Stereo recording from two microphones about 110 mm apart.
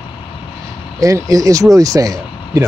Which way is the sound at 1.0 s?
30° right (ahead or behind).